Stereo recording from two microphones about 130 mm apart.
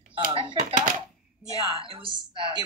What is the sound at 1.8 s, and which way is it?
Speech, 40° right (ahead or behind).